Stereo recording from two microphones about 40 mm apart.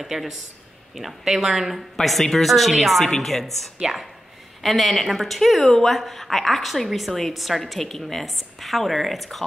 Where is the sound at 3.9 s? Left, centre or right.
Centre.